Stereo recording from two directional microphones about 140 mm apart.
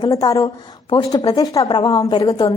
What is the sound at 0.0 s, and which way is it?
A woman's voice, 25° left (ahead or behind).